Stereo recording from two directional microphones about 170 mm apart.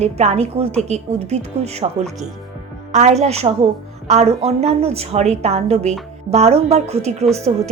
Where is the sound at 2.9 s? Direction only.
40° right (ahead or behind).